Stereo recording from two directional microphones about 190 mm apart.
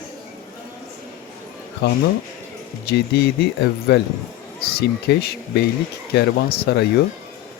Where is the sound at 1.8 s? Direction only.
60° left (ahead or behind).